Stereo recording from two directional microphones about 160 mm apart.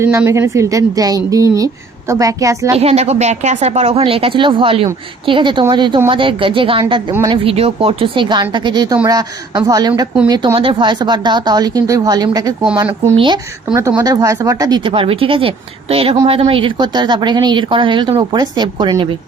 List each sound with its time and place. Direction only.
0.0 s a woman's voice: 15° right (ahead or behind)
2.7 s a woman's voice: 40° right (ahead or behind)
7.1 s a woman's voice: 20° right (ahead or behind)
7.4 s a woman's voice: 40° right (ahead or behind)